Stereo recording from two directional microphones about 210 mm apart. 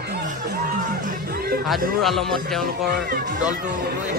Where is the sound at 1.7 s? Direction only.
Centre (ahead or behind).